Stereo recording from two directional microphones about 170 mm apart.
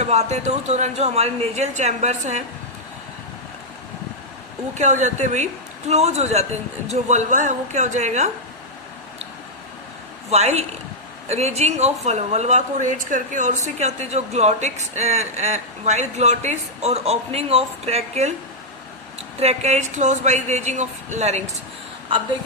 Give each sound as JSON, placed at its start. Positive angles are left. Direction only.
{"t": 0.0, "sound": "a woman's voice", "side_deg": -40}
{"t": 4.7, "sound": "a woman's voice", "side_deg": -45}
{"t": 10.2, "sound": "a woman's voice", "side_deg": -40}
{"t": 19.4, "sound": "a woman's voice", "side_deg": -40}